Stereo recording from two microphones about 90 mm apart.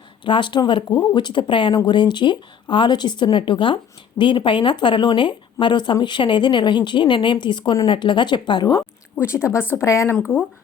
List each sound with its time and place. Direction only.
0.3 s speech: 65° left (ahead or behind)
9.1 s a woman's voice: 30° left (ahead or behind)